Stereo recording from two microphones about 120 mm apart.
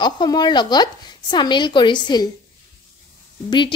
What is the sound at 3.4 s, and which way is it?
Speech, 40° left (ahead or behind).